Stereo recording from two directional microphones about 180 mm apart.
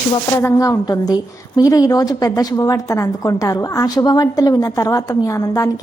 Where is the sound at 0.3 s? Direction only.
20° left (ahead or behind).